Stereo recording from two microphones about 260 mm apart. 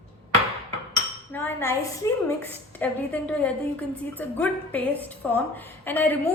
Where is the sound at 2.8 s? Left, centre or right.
Centre.